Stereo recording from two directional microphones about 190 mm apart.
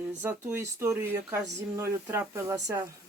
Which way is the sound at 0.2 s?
10° right (ahead or behind).